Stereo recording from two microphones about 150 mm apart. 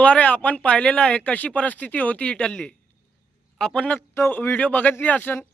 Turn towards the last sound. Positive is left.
turn(degrees=15)  # may be behind; listen again after turning